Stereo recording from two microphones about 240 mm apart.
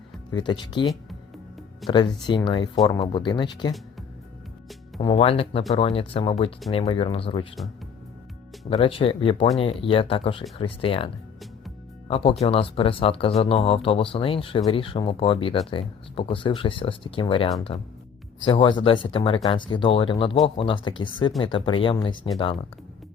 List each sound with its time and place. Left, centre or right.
0.3 s speech: centre
1.9 s speech: centre
4.9 s speech: left
8.7 s speech: left